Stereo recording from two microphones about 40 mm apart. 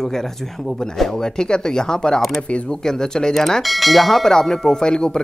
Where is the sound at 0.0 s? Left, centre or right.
Centre.